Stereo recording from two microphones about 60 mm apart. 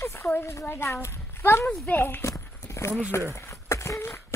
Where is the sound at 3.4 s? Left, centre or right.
Left.